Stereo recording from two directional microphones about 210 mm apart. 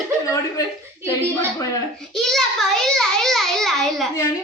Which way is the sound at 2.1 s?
Centre (ahead or behind).